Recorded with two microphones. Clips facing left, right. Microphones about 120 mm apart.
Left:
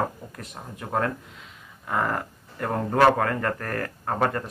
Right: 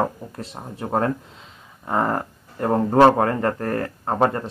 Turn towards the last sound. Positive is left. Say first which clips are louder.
# right 5 dB
turn(degrees=-25)  # may be behind; listen again after turning